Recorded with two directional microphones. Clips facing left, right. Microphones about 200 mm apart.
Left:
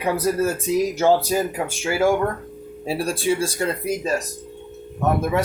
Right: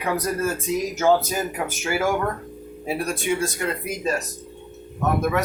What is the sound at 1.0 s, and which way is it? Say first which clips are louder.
Speech: right 1 dB; 30° left (ahead or behind).